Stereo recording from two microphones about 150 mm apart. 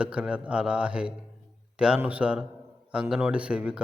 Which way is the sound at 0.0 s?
5° right (ahead or behind).